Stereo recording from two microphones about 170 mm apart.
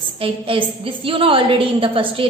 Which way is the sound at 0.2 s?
30° right (ahead or behind).